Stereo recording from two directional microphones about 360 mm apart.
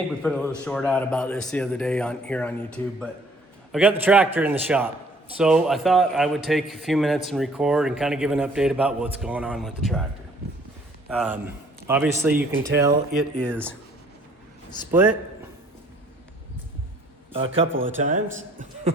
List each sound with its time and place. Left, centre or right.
0.1 s a man's voice: centre
11.1 s a man's voice: centre
17.3 s a man's voice: centre
17.7 s speech: right
18.0 s a man's voice: right